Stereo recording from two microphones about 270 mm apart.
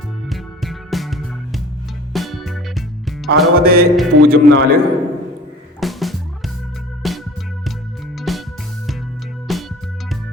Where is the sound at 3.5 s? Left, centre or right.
Right.